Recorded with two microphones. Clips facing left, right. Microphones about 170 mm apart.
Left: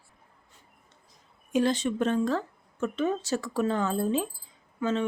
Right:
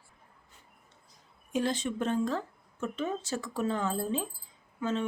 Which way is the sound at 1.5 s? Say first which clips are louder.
Left 5 dB; 80° left.